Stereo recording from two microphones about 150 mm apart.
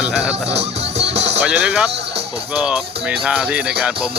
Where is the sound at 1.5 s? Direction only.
5° right (ahead or behind).